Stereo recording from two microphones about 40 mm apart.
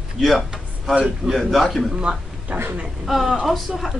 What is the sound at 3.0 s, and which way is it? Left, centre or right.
Speech, centre.